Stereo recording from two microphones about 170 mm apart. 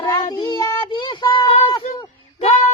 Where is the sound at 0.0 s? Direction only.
25° left (ahead or behind).